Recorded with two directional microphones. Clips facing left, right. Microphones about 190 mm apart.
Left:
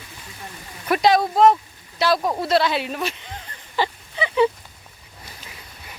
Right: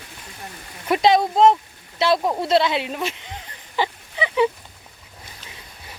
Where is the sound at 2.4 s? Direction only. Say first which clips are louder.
Right 1 dB; 25° right (ahead or behind).